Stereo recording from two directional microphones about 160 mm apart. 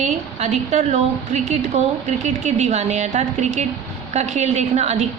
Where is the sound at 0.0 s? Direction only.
45° right (ahead or behind).